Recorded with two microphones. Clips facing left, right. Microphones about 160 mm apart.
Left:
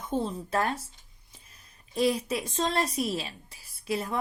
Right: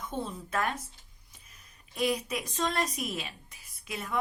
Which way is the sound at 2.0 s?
30° left (ahead or behind).